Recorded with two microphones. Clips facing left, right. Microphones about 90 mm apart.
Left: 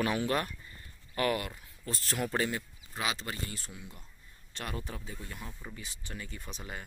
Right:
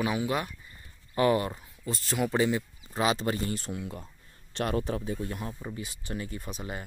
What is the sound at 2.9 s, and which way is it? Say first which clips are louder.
Speech: right 8 dB; 35° right (ahead or behind).